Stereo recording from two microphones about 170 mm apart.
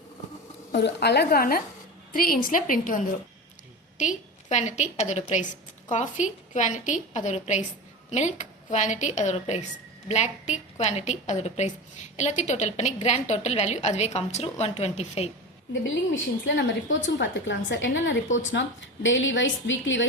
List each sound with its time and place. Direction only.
0.7 s a woman's voice: 75° left (ahead or behind); by 15.3 s 35° left (ahead or behind)
16.5 s a woman's voice: 90° left